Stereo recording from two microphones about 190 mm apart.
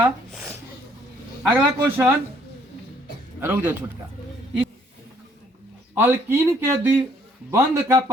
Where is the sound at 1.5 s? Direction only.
10° right (ahead or behind).